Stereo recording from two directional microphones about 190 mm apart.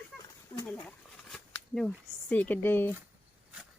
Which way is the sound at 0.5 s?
10° left (ahead or behind).